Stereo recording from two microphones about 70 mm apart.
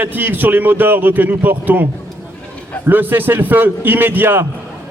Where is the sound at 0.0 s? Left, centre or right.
Right.